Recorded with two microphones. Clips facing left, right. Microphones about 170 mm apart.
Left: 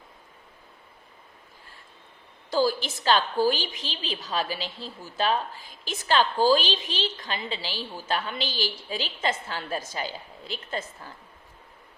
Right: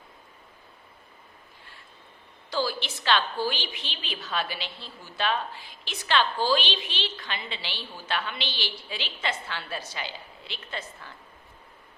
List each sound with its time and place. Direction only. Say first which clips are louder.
2.5 s a woman's voice: left 5 dB; 45° left (ahead or behind)